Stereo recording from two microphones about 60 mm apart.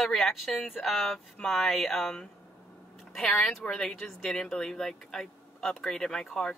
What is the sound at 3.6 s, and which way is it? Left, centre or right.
Speech, centre.